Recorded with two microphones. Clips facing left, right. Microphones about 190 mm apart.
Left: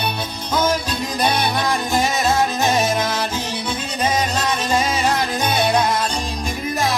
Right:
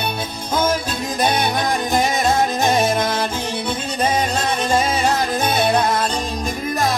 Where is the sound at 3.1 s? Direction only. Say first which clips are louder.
Right 1 dB; 55° right (ahead or behind).